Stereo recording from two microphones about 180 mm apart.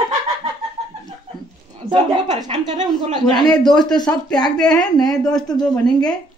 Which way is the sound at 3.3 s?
25° left (ahead or behind).